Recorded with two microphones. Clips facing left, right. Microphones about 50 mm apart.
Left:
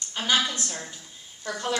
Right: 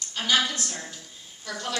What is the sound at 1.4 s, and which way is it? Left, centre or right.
Speech, left.